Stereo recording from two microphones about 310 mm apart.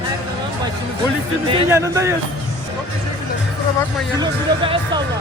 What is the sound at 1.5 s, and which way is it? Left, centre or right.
Speech, centre.